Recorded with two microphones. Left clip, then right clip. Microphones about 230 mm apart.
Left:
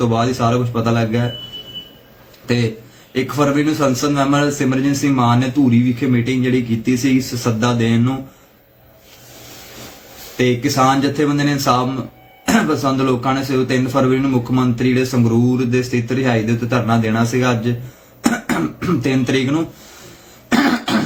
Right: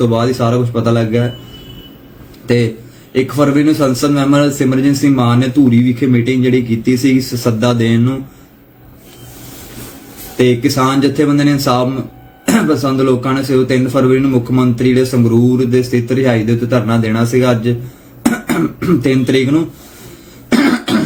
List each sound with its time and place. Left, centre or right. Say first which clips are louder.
0.0 s a man's voice: right 3 dB; centre
3.1 s a man's voice: right 4 dB; centre
10.3 s a man's voice: right 4 dB; centre
20.5 s throat clearing: right 3 dB; centre